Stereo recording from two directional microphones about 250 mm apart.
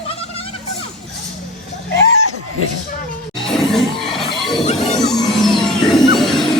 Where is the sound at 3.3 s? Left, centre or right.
Centre.